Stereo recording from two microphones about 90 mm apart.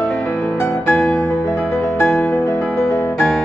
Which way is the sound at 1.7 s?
20° left (ahead or behind).